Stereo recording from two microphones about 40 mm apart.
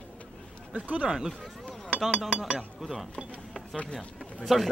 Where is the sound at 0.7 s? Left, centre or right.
Right.